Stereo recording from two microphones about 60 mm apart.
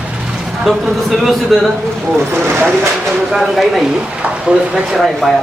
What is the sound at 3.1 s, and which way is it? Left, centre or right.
Speech, centre.